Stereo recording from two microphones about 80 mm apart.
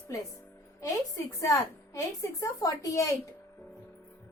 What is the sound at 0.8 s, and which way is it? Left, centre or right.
A woman's voice, left.